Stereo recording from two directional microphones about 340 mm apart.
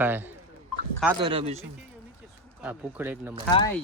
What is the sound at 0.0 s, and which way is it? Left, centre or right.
Speech, centre.